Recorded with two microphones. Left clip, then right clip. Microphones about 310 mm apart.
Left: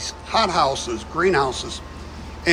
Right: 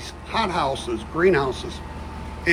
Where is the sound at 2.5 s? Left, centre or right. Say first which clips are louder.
Left 1 dB; centre.